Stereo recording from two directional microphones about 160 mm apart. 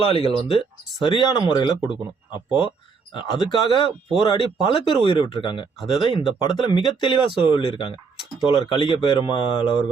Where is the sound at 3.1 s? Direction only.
30° left (ahead or behind).